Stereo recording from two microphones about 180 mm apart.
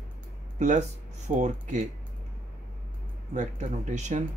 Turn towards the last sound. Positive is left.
turn(degrees=-40)  # may be behind; listen again after turning